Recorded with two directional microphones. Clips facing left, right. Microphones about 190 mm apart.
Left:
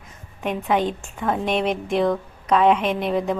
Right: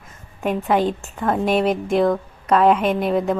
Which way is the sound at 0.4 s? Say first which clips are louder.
Right 3 dB; centre (ahead or behind).